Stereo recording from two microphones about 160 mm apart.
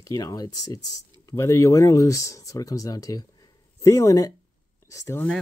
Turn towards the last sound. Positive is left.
turn(degrees=15)  # may be behind; listen again after turning